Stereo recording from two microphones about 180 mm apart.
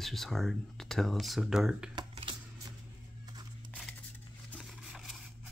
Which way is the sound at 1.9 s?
30° right (ahead or behind).